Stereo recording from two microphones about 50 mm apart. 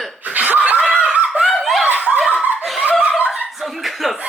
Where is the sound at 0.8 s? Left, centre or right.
Centre.